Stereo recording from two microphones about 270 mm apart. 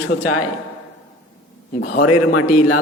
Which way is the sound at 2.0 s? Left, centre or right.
Left.